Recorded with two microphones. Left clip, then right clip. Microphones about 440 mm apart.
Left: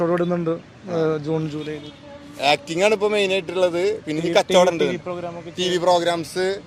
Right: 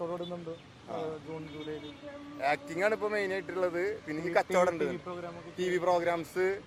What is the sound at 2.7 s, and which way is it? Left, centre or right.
A man's voice, left.